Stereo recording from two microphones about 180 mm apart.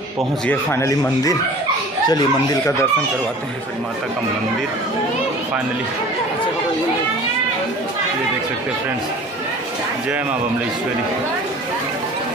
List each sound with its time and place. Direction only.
0.5 s speech: 15° left (ahead or behind)